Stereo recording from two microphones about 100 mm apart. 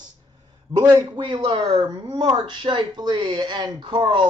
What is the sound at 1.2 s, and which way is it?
Speech, 55° right (ahead or behind).